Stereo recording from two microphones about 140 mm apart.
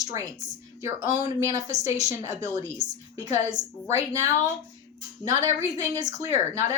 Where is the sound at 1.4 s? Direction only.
25° right (ahead or behind).